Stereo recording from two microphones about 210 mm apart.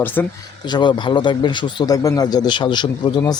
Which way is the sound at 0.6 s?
20° left (ahead or behind).